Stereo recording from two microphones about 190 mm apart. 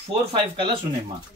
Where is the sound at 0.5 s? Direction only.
25° right (ahead or behind).